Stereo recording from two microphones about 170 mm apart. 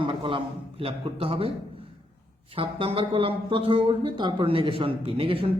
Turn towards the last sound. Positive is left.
turn(degrees=-35)  # may be behind; listen again after turning